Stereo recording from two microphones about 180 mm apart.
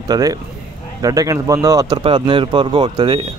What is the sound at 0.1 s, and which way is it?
Speech, 20° right (ahead or behind).